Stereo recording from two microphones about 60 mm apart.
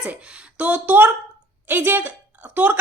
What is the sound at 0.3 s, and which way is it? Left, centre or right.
A woman's voice, right.